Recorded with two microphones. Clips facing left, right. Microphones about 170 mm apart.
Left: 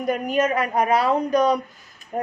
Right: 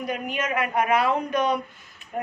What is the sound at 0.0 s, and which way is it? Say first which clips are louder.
A woman's voice: left 7 dB; 45° left (ahead or behind).